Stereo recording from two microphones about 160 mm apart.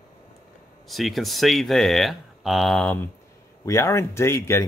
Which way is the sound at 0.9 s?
Centre (ahead or behind).